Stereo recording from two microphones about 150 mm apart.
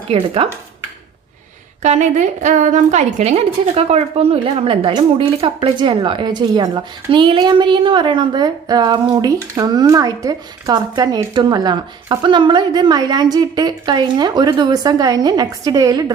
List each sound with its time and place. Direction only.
0.1 s speech: 40° right (ahead or behind)
1.8 s a woman's voice: 50° right (ahead or behind); by 16.1 s 25° right (ahead or behind)